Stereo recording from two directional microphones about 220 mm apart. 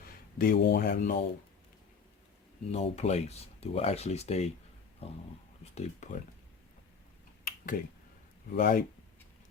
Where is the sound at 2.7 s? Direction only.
30° left (ahead or behind).